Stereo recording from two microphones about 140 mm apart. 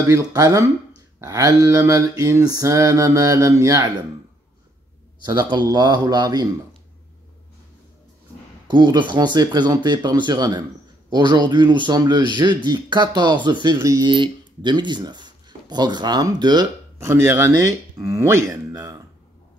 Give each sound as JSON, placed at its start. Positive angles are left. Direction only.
{"t": 0.0, "sound": "mantra", "side_deg": -25}
{"t": 5.2, "sound": "mantra", "side_deg": -30}
{"t": 8.6, "sound": "speech", "side_deg": -35}
{"t": 13.7, "sound": "mantra", "side_deg": -20}
{"t": 14.0, "sound": "speech", "side_deg": -35}
{"t": 17.0, "sound": "mantra", "side_deg": -20}